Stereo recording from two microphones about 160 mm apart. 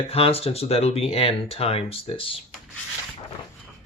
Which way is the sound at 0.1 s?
35° left (ahead or behind).